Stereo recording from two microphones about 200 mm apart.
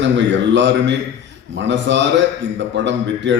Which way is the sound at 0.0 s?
65° right (ahead or behind).